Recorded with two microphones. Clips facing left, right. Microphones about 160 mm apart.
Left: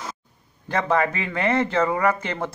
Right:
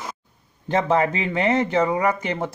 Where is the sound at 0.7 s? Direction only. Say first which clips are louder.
Right 2 dB; 20° right (ahead or behind).